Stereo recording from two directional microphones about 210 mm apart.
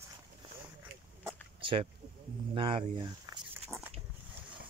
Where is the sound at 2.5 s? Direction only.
25° right (ahead or behind).